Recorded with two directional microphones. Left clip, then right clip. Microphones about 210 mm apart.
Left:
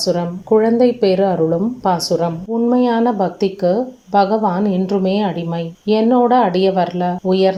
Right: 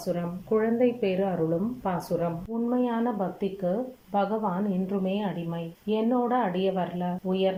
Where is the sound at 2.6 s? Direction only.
25° left (ahead or behind).